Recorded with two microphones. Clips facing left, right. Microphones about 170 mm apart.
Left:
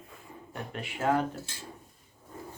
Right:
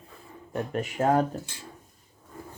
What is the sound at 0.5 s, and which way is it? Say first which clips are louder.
Speech: right 9 dB; 45° right (ahead or behind).